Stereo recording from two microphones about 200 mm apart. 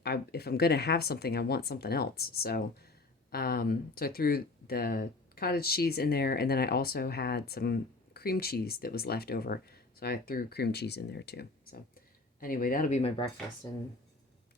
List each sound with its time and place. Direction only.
0.0 s speech: 55° left (ahead or behind); by 13.2 s 30° left (ahead or behind)
13.6 s speech: 15° left (ahead or behind)